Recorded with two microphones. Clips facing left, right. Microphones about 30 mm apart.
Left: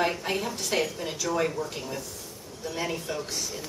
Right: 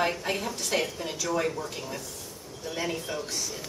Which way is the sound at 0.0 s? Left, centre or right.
Centre.